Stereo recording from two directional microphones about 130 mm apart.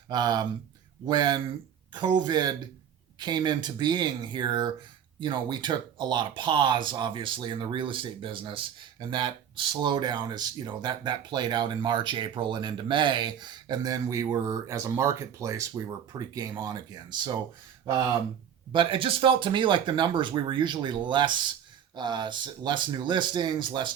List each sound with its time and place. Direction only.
0.1 s speech: 30° right (ahead or behind)
18.7 s speech: 40° right (ahead or behind)